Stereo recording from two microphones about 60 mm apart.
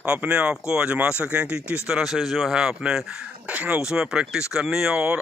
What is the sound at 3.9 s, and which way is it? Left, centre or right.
Speech, centre.